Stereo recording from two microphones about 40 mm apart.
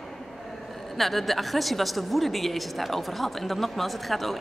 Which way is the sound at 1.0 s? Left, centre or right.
Centre.